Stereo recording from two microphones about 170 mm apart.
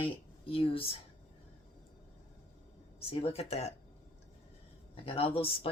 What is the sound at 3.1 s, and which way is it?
Speech, 35° left (ahead or behind).